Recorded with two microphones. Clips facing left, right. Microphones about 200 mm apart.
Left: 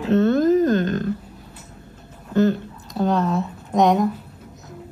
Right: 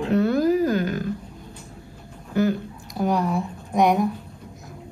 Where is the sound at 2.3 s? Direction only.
20° left (ahead or behind).